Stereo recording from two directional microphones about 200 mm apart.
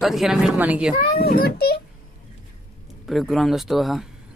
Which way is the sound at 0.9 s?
50° left (ahead or behind).